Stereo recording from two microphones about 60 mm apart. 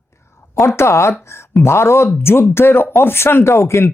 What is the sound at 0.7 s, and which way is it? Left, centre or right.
Speech, left.